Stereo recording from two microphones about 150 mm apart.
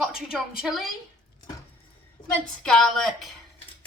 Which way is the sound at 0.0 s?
5° right (ahead or behind).